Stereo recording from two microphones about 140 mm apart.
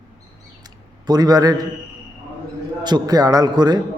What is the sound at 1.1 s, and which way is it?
Speech, 30° right (ahead or behind).